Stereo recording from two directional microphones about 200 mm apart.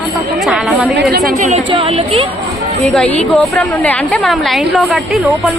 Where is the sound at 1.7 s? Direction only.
30° right (ahead or behind).